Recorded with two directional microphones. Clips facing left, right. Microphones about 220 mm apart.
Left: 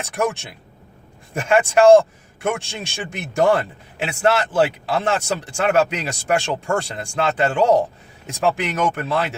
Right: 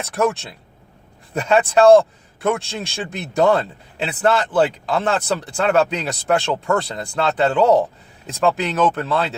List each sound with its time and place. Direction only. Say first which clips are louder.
0.1 s speech: right 3 dB; 15° left (ahead or behind)